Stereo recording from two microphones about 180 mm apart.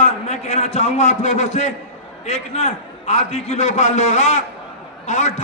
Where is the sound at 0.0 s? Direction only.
35° left (ahead or behind).